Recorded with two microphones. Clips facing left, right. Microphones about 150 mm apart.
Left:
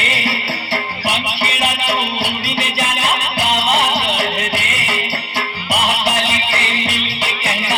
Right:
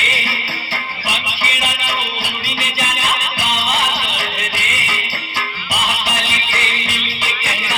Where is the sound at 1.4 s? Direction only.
65° left (ahead or behind).